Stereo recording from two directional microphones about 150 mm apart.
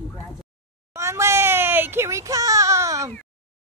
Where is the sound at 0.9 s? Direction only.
20° right (ahead or behind).